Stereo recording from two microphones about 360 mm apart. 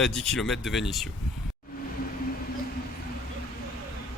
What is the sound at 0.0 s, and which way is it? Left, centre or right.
Speech, centre.